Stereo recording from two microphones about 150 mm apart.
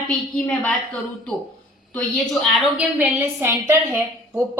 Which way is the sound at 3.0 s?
15° right (ahead or behind).